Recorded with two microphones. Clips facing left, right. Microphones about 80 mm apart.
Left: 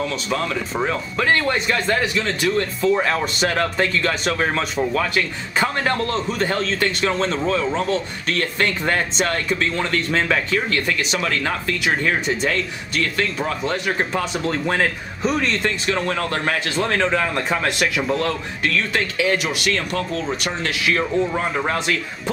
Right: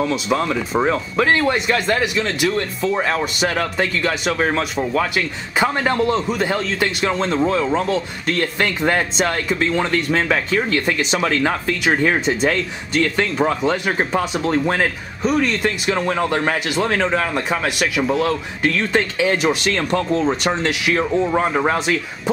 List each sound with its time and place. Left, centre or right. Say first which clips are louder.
0.0 s speech: right 4 dB; centre
10.9 s speech: right 3 dB; centre
18.6 s speech: right 3 dB; right
20.0 s speech: right 5 dB; centre
20.2 s speech: right 5 dB; right